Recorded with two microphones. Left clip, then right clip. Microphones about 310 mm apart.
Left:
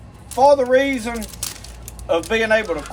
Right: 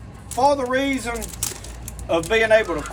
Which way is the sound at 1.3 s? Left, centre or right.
Centre.